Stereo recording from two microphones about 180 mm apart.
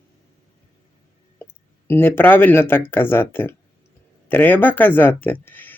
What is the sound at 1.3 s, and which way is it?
Speech, 10° left (ahead or behind).